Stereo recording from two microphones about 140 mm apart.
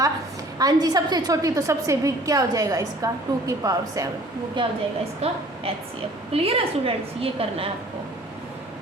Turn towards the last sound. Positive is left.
turn(degrees=-45)  # may be behind; listen again after turning